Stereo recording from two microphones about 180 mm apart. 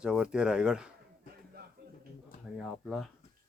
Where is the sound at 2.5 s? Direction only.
Centre (ahead or behind).